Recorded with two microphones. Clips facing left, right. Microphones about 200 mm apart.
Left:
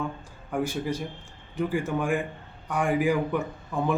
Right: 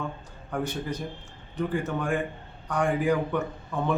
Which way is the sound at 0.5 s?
10° left (ahead or behind).